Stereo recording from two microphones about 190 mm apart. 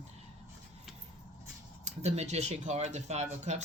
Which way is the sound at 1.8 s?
35° right (ahead or behind).